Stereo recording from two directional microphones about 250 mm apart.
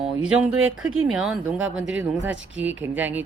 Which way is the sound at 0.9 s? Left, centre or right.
Right.